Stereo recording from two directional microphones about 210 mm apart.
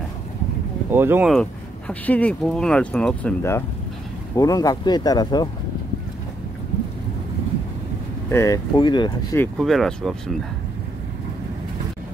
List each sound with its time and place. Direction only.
0.9 s speech: 10° right (ahead or behind)
1.3 s speech: 5° left (ahead or behind)
8.3 s speech: 15° left (ahead or behind)
9.4 s speech: centre (ahead or behind)